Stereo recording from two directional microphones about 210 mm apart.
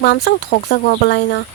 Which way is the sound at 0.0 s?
50° left (ahead or behind).